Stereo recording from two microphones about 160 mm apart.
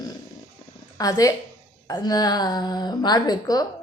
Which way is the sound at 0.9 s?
20° left (ahead or behind).